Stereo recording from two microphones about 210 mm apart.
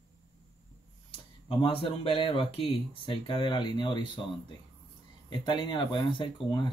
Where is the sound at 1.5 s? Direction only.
25° left (ahead or behind).